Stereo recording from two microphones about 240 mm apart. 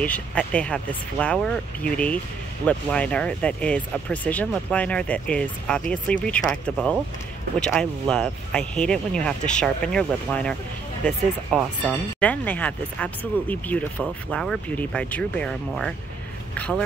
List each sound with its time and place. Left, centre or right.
0.0 s speech: centre
11.5 s speech: centre